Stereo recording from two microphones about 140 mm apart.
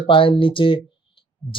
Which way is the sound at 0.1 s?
40° left (ahead or behind).